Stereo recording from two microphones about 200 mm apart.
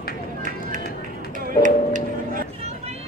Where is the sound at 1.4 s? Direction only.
40° right (ahead or behind).